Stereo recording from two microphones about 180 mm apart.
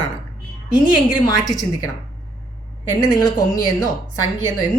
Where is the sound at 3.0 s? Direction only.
20° left (ahead or behind).